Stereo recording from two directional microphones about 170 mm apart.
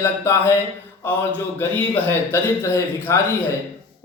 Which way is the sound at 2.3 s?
15° left (ahead or behind).